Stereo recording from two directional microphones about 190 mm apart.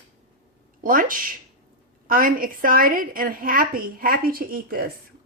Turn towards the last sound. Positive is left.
turn(degrees=-50)  # may be behind; listen again after turning